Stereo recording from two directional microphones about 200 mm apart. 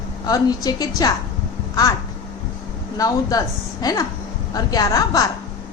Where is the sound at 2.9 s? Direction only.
20° left (ahead or behind).